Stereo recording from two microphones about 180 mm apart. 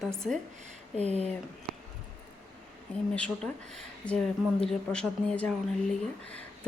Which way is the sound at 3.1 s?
5° left (ahead or behind).